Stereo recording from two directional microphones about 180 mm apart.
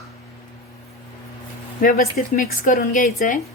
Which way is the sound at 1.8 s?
50° left (ahead or behind).